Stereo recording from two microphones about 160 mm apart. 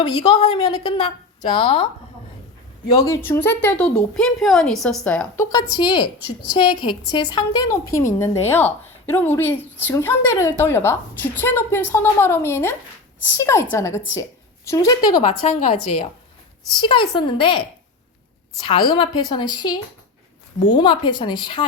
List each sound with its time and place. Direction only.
0.0 s a woman's voice: 25° left (ahead or behind)
2.9 s a woman's voice: 20° left (ahead or behind)
5.4 s a woman's voice: 25° left (ahead or behind)
15.4 s a woman's voice: 45° left (ahead or behind)
16.7 s a woman's voice: 30° left (ahead or behind)
18.6 s a woman's voice: 30° left (ahead or behind)